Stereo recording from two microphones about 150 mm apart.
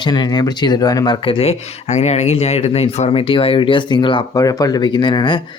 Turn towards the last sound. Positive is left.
turn(degrees=30)  # may be behind; listen again after turning